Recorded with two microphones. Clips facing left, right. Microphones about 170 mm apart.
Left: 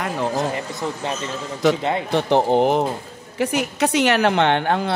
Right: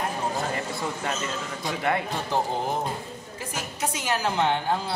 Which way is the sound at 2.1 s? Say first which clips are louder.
Left 10 dB; 70° left (ahead or behind).